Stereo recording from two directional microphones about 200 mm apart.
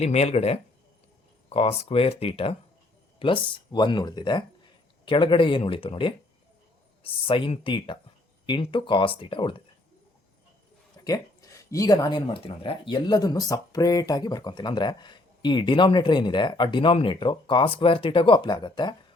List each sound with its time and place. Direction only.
0.0 s speech: 30° left (ahead or behind)
11.0 s speech: 15° left (ahead or behind)